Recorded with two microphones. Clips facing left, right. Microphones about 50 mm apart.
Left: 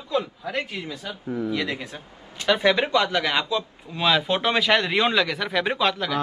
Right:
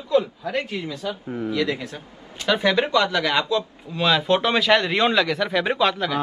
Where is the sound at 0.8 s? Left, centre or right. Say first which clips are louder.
Right 4 dB; centre.